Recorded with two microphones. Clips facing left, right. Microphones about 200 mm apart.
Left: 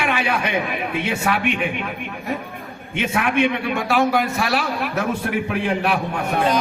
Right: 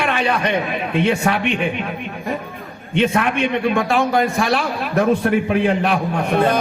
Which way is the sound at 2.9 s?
5° left (ahead or behind).